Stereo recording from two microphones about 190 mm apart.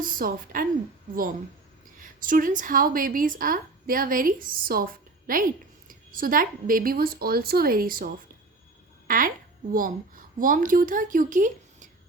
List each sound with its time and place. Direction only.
0.0 s a woman's voice: 45° right (ahead or behind)
2.0 s a woman's voice: 45° right (ahead or behind)